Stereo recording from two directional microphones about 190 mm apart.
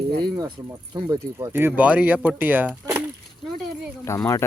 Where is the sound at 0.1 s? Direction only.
55° right (ahead or behind).